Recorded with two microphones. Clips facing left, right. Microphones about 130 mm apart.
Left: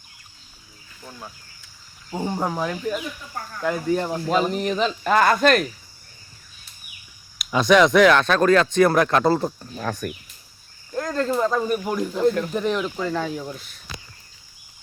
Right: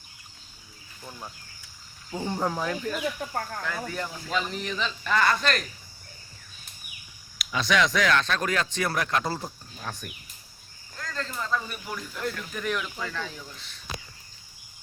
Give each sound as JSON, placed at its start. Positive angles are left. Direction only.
{"t": 2.0, "sound": "speech", "side_deg": 20}
{"t": 3.6, "sound": "speech", "side_deg": 40}
{"t": 7.3, "sound": "speech", "side_deg": 50}
{"t": 10.9, "sound": "speech", "side_deg": 50}
{"t": 12.5, "sound": "speech", "side_deg": 30}
{"t": 13.2, "sound": "speech", "side_deg": 50}